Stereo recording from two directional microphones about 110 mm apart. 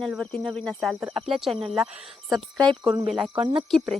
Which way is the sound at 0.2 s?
10° left (ahead or behind).